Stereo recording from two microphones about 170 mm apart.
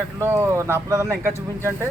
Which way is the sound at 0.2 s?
15° right (ahead or behind).